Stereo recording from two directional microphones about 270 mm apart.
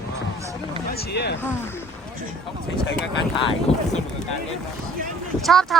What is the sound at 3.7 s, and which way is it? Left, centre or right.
Speech, left.